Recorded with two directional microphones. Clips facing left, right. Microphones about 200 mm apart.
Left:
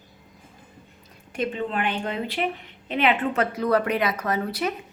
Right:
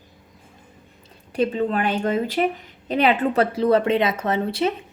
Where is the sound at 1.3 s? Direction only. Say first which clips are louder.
Right 6 dB; 35° right (ahead or behind).